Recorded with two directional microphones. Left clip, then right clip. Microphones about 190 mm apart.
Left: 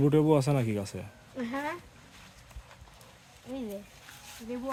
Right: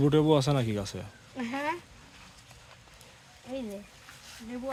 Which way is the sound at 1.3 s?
65° right (ahead or behind).